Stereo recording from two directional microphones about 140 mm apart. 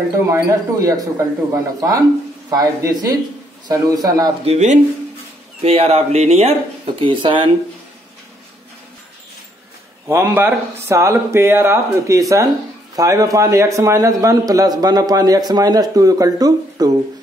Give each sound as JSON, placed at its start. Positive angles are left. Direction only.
{"t": 0.3, "sound": "a man's voice", "side_deg": -25}
{"t": 4.5, "sound": "speech", "side_deg": -55}
{"t": 7.0, "sound": "speech", "side_deg": -35}
{"t": 10.0, "sound": "a man's voice", "side_deg": -20}